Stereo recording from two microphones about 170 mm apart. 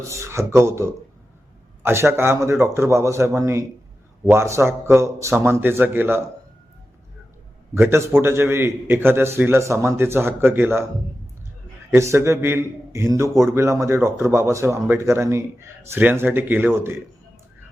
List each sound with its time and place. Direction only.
0.0 s a man's voice: 15° right (ahead or behind)
7.7 s a man's voice: 15° right (ahead or behind)
11.9 s a man's voice: 15° right (ahead or behind)